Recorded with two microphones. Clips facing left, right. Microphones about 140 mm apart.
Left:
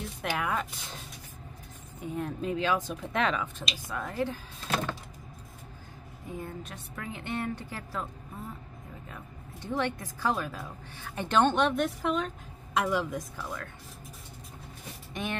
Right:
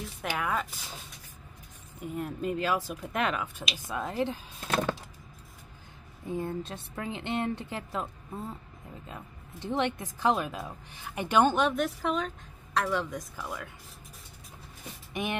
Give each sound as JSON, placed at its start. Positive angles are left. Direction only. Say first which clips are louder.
{"t": 0.2, "sound": "speech", "louder": "even", "side_deg": 0}
{"t": 2.0, "sound": "speech", "louder": "left 1 dB", "side_deg": -5}
{"t": 3.9, "sound": "a woman's voice", "louder": "right 2 dB", "side_deg": -20}
{"t": 6.3, "sound": "a woman's voice", "louder": "right 6 dB", "side_deg": -30}
{"t": 9.1, "sound": "speech", "louder": "right 1 dB", "side_deg": -20}
{"t": 15.2, "sound": "speech", "louder": "right 2 dB", "side_deg": -10}